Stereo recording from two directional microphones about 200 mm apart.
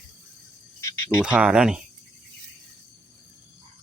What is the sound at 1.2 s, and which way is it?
Speech, 5° right (ahead or behind).